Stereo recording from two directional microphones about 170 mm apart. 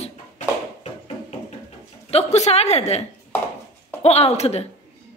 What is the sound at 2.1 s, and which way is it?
Speech, 40° left (ahead or behind).